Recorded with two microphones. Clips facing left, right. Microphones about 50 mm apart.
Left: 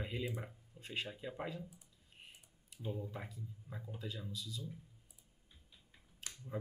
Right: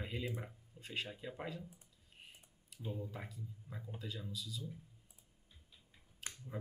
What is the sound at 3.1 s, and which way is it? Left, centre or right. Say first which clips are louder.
Speech: left 1 dB; centre.